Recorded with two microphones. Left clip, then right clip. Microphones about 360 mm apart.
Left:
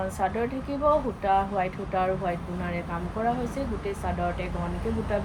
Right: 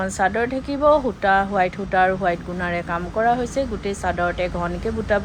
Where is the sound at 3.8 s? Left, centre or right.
Right.